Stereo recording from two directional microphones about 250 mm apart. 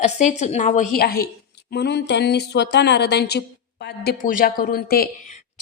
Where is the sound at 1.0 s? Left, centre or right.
Left.